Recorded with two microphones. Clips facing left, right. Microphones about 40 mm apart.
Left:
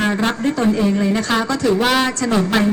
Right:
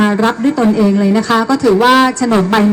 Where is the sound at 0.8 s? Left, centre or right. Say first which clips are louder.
Right 6 dB; right.